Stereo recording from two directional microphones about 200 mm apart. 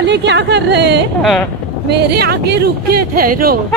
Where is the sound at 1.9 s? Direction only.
55° right (ahead or behind).